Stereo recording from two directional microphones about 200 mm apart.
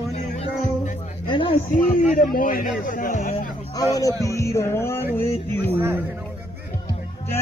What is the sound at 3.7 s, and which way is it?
Speech, 15° left (ahead or behind).